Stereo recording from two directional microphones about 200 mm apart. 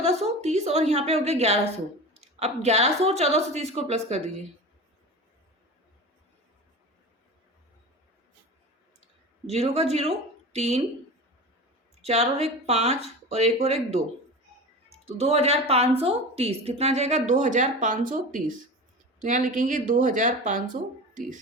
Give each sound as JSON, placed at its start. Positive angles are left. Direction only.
{"t": 0.0, "sound": "a woman's voice", "side_deg": -30}
{"t": 9.5, "sound": "speech", "side_deg": -30}
{"t": 12.0, "sound": "a woman's voice", "side_deg": -30}